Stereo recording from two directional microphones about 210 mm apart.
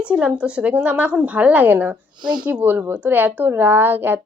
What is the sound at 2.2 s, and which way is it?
Speech, 20° right (ahead or behind).